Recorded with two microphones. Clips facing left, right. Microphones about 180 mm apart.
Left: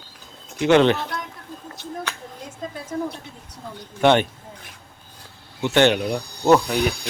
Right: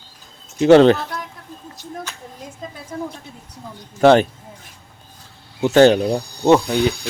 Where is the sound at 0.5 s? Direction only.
35° right (ahead or behind).